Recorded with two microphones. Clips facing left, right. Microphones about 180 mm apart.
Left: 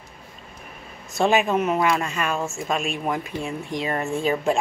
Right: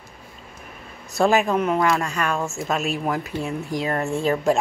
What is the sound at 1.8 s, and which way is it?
Speech, 15° left (ahead or behind).